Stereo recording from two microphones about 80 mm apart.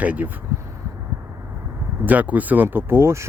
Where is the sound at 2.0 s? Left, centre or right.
Right.